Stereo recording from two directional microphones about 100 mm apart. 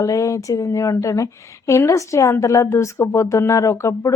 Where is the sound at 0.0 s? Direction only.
30° left (ahead or behind).